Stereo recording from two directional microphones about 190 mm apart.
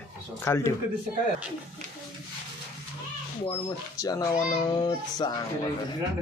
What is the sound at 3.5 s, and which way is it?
Speech, 20° left (ahead or behind).